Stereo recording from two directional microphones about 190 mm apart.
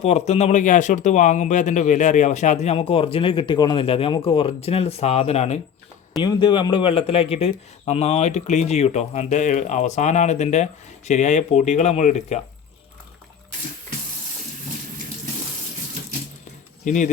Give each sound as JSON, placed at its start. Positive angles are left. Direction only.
{"t": 0.0, "sound": "speech", "side_deg": 35}
{"t": 6.1, "sound": "speech", "side_deg": 20}
{"t": 16.8, "sound": "speech", "side_deg": 40}